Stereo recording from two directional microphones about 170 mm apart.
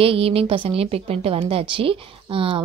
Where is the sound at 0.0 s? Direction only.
35° right (ahead or behind).